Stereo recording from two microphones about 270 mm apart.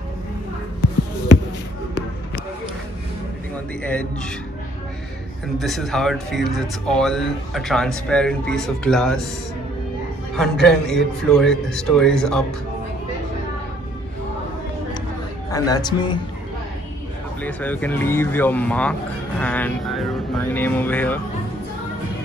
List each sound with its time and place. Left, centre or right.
3.8 s speech: centre
5.6 s speech: centre
10.3 s speech: centre
15.5 s speech: centre
17.4 s speech: centre